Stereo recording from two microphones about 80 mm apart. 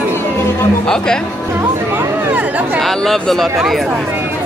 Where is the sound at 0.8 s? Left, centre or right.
Centre.